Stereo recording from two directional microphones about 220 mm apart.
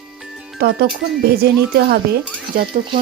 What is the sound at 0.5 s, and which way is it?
Speech, 45° right (ahead or behind).